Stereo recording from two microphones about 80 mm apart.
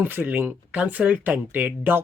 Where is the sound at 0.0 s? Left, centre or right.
Right.